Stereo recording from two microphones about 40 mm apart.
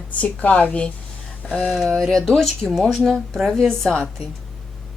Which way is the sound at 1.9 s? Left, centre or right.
Centre.